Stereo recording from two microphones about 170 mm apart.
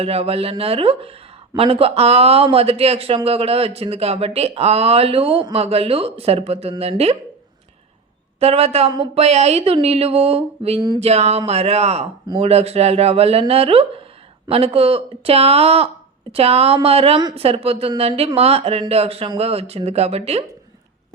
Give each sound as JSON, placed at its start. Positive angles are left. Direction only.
{"t": 0.0, "sound": "speech", "side_deg": -35}
{"t": 8.4, "sound": "speech", "side_deg": -35}
{"t": 11.0, "sound": "speech", "side_deg": -40}